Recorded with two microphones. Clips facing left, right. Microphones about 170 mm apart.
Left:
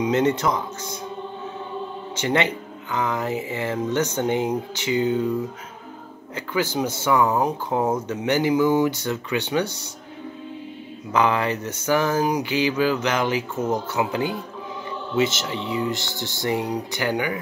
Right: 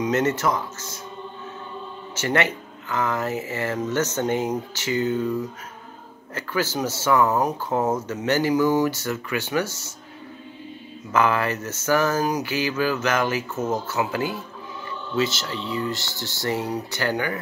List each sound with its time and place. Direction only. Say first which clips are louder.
0.0 s speech: left 2 dB; 15° left (ahead or behind)
2.1 s speech: left 1 dB; 15° left (ahead or behind)
6.3 s speech: left 1 dB; 15° left (ahead or behind)
11.1 s speech: left 1 dB; 15° left (ahead or behind)